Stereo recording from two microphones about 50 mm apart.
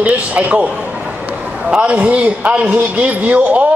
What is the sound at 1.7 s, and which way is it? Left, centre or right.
A man's voice, right.